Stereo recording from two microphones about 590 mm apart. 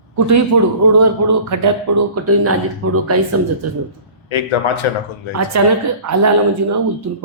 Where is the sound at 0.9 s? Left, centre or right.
Right.